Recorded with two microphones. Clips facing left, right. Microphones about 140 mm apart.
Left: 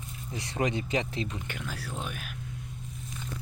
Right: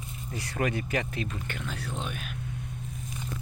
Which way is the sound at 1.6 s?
5° left (ahead or behind).